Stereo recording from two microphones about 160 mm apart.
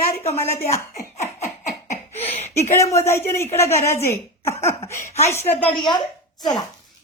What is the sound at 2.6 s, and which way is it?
A woman's voice, 15° left (ahead or behind).